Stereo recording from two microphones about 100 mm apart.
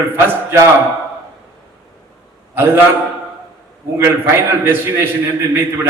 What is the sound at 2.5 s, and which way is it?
Speech, 20° right (ahead or behind).